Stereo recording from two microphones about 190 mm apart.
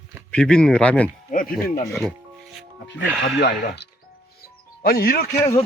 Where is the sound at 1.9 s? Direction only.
5° left (ahead or behind).